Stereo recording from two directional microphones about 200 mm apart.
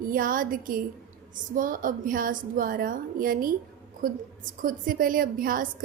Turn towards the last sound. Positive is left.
turn(degrees=-45)  # may be behind; listen again after turning